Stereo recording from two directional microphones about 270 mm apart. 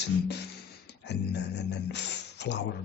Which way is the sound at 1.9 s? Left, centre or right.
Left.